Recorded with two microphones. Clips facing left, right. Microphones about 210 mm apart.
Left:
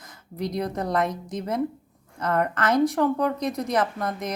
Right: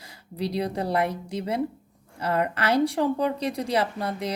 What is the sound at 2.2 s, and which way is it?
A woman's voice, 10° right (ahead or behind).